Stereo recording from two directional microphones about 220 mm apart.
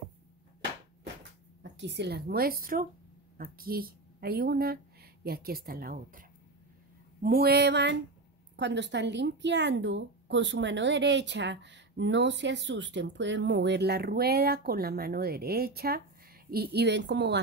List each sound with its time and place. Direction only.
1.6 s a woman's voice: 50° right (ahead or behind)